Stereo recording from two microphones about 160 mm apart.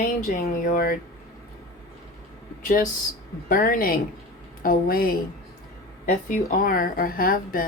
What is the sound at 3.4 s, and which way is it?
Speech, 60° left (ahead or behind).